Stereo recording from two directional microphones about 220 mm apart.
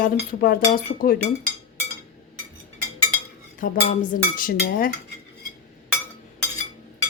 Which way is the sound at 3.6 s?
40° left (ahead or behind).